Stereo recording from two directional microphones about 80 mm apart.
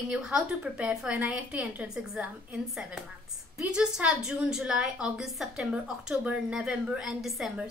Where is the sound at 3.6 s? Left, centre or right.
Centre.